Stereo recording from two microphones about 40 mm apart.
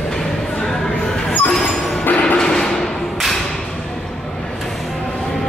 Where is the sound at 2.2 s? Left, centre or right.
Centre.